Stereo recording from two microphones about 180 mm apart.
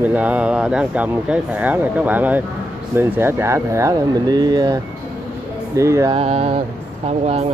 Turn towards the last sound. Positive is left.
turn(degrees=-35)  # may be behind; listen again after turning